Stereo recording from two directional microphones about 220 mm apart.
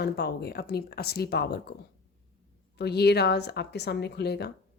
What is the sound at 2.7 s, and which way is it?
A woman's voice, 50° left (ahead or behind).